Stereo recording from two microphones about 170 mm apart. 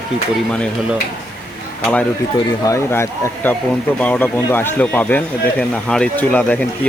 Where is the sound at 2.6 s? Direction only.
15° left (ahead or behind).